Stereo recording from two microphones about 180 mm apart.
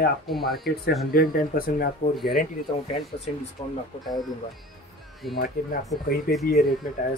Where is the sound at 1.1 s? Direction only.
55° left (ahead or behind).